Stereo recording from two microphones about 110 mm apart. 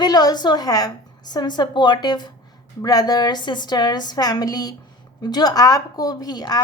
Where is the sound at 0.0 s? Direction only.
35° left (ahead or behind).